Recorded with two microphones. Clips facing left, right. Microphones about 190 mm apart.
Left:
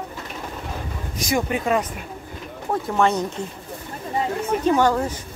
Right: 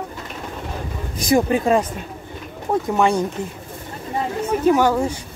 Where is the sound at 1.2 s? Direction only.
35° right (ahead or behind).